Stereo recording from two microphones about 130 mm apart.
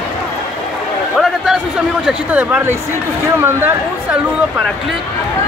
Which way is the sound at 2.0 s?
10° right (ahead or behind).